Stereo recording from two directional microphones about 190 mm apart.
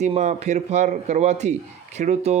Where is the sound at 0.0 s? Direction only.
35° right (ahead or behind).